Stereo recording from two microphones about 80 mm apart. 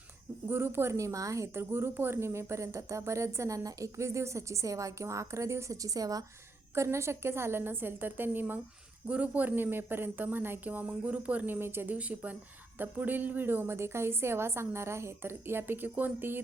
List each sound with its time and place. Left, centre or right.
0.4 s a woman's voice: right
6.7 s a woman's voice: right
11.9 s a woman's voice: centre